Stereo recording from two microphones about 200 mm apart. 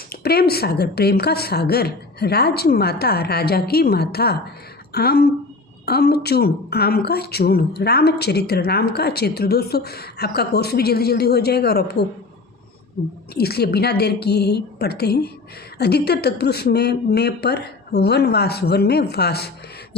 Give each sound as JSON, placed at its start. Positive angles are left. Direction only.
{"t": 0.1, "sound": "a woman's voice", "side_deg": 50}
{"t": 13.3, "sound": "a woman's voice", "side_deg": 50}